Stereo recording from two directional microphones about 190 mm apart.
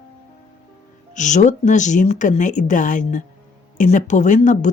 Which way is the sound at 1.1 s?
40° left (ahead or behind).